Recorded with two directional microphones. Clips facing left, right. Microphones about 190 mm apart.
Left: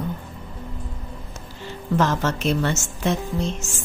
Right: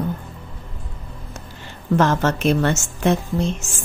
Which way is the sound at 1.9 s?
55° right (ahead or behind).